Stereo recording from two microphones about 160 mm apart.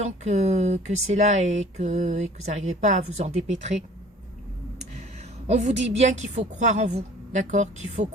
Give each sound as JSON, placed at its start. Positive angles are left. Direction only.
{"t": 0.0, "sound": "speech", "side_deg": -45}
{"t": 5.5, "sound": "speech", "side_deg": -45}